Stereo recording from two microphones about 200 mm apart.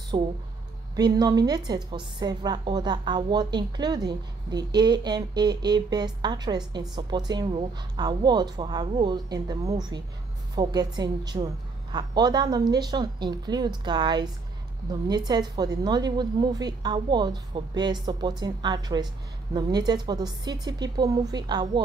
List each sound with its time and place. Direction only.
0.1 s a woman's voice: 20° right (ahead or behind)